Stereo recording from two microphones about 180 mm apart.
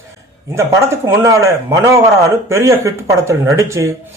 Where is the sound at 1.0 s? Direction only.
15° right (ahead or behind).